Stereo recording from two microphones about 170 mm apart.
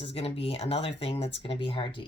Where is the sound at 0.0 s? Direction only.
35° left (ahead or behind).